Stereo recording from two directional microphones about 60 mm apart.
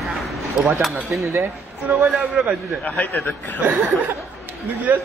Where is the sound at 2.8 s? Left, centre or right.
Left.